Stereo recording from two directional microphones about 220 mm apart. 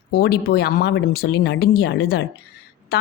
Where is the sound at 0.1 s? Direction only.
45° left (ahead or behind).